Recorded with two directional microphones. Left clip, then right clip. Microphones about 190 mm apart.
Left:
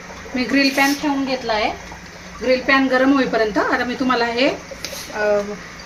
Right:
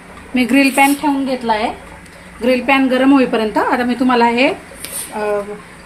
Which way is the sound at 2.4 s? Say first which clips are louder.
Right 3 dB; 45° right (ahead or behind).